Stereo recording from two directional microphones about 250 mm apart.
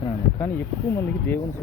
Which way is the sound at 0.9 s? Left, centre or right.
Centre.